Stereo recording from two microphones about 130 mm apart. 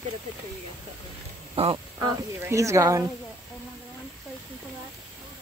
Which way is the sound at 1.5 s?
45° right (ahead or behind).